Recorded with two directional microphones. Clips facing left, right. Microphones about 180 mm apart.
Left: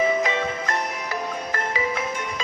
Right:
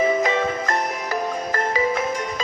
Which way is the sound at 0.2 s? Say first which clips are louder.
Right 3 dB; 40° right (ahead or behind).